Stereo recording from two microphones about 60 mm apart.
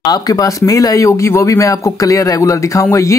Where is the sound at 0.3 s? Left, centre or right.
Left.